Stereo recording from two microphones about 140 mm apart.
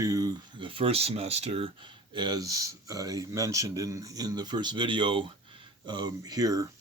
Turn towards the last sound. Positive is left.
turn(degrees=-25)  # may be behind; listen again after turning